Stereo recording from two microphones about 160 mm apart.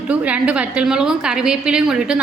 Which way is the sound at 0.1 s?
10° right (ahead or behind).